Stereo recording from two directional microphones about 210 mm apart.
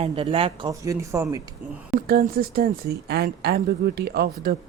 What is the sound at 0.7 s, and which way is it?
Speech, 15° right (ahead or behind).